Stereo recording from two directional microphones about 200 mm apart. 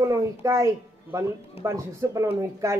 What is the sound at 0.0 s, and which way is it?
A woman's voice, 15° right (ahead or behind).